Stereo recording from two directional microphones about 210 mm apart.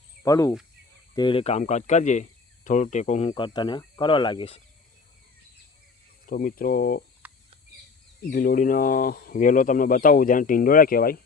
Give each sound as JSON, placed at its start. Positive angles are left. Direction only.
{"t": 0.2, "sound": "speech", "side_deg": 15}
{"t": 6.2, "sound": "speech", "side_deg": 40}
{"t": 7.2, "sound": "bird", "side_deg": -10}
{"t": 8.3, "sound": "speech", "side_deg": 40}